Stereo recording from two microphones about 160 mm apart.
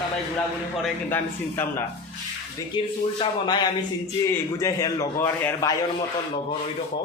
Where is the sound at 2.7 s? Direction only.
30° left (ahead or behind); by 5.7 s 15° left (ahead or behind).